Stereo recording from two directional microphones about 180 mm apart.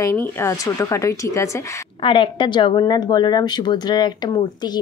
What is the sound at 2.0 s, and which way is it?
Speech, 25° left (ahead or behind).